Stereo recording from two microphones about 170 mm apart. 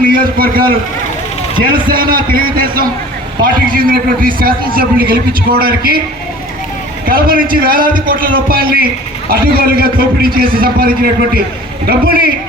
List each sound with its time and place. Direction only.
0.1 s a man's voice: 60° right (ahead or behind)
7.0 s a man's voice: 60° right (ahead or behind)